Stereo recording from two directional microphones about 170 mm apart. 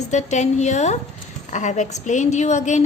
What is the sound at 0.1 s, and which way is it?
A woman's voice, 45° left (ahead or behind).